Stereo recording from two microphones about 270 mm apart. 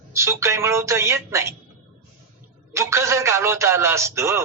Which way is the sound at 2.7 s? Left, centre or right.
Centre.